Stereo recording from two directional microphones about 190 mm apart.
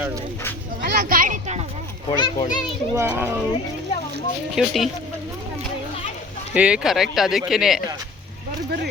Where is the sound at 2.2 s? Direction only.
25° left (ahead or behind).